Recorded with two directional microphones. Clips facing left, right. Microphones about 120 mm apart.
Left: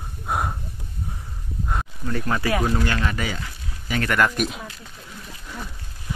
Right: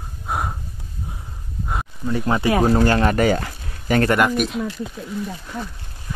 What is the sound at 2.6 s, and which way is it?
Speech, 40° right (ahead or behind).